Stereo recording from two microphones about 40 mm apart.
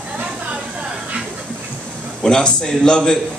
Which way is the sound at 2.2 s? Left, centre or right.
Left.